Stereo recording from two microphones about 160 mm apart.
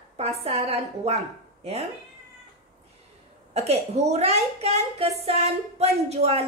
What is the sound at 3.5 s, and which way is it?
A woman's voice, 40° right (ahead or behind).